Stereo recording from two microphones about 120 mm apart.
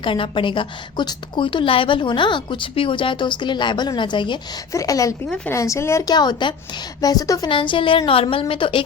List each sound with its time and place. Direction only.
0.0 s a woman's voice: 45° left (ahead or behind)
4.7 s speech: 25° left (ahead or behind)
6.1 s a woman's voice: 35° left (ahead or behind)
7.5 s a woman's voice: 45° left (ahead or behind)